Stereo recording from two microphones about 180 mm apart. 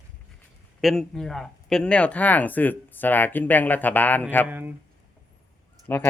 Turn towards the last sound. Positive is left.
turn(degrees=10)  # may be behind; listen again after turning